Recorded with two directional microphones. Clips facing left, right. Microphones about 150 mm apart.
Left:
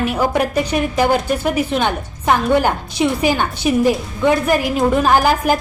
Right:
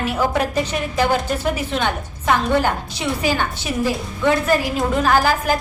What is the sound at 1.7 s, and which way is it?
A woman's voice, 15° left (ahead or behind).